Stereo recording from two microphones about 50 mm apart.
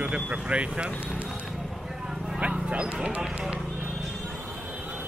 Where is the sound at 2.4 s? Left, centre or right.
Right.